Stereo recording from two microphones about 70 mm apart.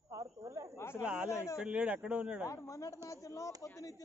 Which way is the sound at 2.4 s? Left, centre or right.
Left.